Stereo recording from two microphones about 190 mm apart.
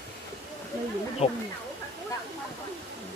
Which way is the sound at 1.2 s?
30° left (ahead or behind).